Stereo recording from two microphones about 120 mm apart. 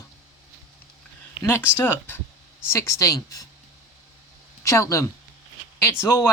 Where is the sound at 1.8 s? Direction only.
15° left (ahead or behind).